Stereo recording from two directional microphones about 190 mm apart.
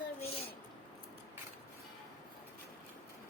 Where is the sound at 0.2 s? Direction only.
30° left (ahead or behind).